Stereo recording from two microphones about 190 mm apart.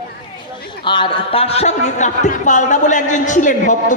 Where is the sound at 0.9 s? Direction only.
25° left (ahead or behind).